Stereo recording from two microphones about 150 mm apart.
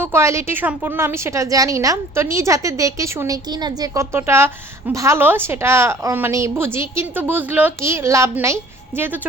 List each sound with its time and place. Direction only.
0.0 s a woman's voice: 15° right (ahead or behind)